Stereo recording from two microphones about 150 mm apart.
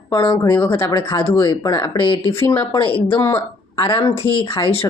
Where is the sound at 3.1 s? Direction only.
15° left (ahead or behind).